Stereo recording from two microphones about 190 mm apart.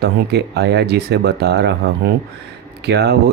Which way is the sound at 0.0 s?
60° right (ahead or behind).